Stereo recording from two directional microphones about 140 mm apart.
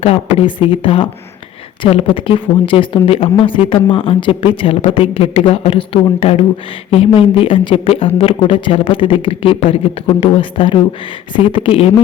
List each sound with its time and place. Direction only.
0.0 s a woman's voice: 45° left (ahead or behind)